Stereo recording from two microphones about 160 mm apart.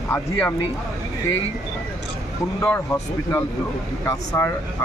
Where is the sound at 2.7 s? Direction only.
10° left (ahead or behind).